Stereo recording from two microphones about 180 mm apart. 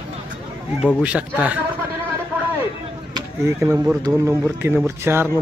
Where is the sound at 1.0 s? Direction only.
5° right (ahead or behind).